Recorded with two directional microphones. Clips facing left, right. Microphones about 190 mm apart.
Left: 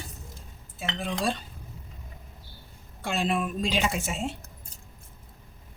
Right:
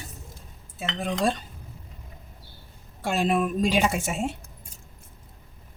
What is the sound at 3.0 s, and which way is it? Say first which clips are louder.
Speech: right 4 dB; 45° right (ahead or behind).